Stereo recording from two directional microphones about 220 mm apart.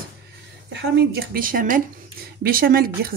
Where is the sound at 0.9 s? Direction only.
45° right (ahead or behind).